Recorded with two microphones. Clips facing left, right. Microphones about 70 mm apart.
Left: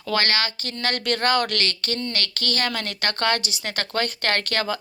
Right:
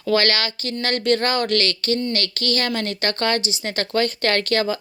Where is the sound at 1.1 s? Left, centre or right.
Left.